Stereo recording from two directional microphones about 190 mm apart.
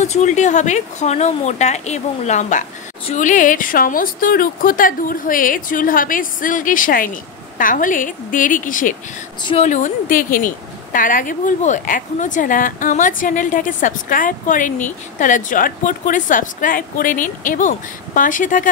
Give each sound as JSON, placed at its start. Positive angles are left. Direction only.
{"t": 0.0, "sound": "a woman's voice", "side_deg": 40}
{"t": 9.4, "sound": "a woman's voice", "side_deg": 25}
{"t": 9.7, "sound": "a woman's voice", "side_deg": 40}